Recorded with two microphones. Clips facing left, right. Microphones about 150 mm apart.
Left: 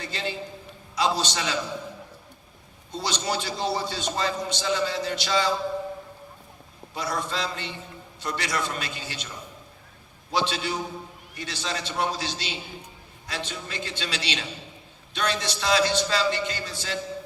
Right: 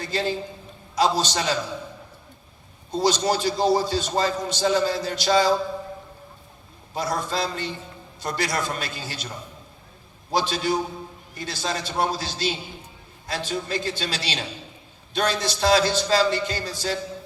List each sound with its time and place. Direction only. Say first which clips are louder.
0.0 s a man's voice: right 6 dB; 40° right (ahead or behind)
2.9 s a man's voice: right 7 dB; 40° right (ahead or behind)
6.9 s a man's voice: right 3 dB; 40° right (ahead or behind)
10.3 s a man's voice: right 4 dB; 40° right (ahead or behind)